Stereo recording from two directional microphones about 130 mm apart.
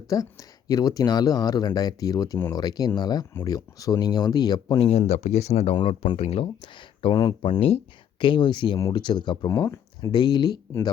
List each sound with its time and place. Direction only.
0.1 s speech: 25° left (ahead or behind)
4.8 s speech: 55° left (ahead or behind); by 10.6 s 30° left (ahead or behind)